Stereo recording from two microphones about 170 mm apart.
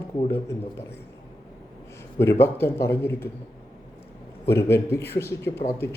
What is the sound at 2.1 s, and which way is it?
A man's voice, 15° left (ahead or behind).